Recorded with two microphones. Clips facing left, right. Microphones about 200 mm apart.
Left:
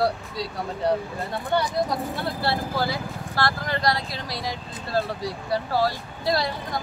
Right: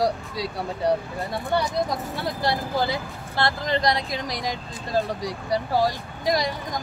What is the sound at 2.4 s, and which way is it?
Speech, 20° right (ahead or behind).